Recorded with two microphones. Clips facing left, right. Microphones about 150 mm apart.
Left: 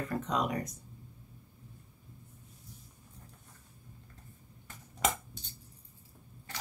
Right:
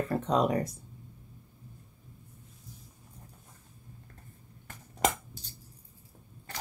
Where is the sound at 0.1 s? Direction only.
30° right (ahead or behind).